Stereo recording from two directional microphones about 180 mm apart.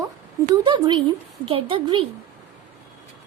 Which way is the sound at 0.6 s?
25° right (ahead or behind).